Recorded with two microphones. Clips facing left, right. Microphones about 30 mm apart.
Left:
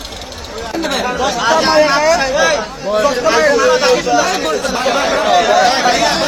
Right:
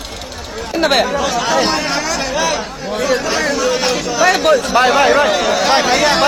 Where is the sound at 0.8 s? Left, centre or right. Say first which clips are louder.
Right 5 dB; right.